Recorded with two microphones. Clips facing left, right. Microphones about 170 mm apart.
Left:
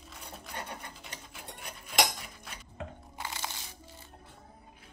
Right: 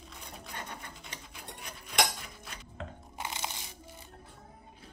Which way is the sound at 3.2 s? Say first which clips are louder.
Right 1 dB; 20° right (ahead or behind).